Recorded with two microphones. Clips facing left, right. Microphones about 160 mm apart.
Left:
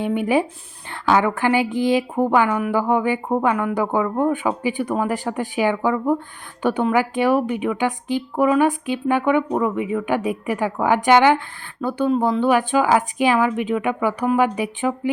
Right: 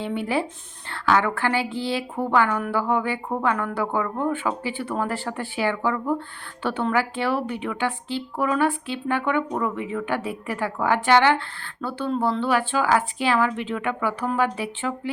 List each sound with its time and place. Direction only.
0.0 s speech: 15° left (ahead or behind)